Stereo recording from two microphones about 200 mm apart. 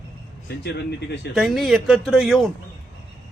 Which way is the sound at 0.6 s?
60° left (ahead or behind).